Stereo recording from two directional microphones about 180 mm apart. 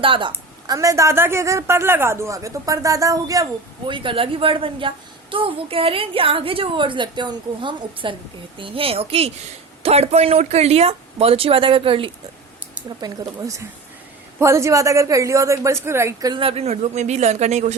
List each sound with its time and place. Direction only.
0.0 s a woman's voice: 30° right (ahead or behind)